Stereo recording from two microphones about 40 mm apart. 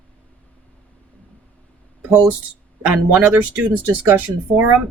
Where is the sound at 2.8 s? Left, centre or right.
Right.